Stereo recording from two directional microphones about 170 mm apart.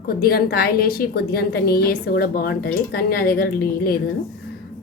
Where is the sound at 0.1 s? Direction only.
65° left (ahead or behind).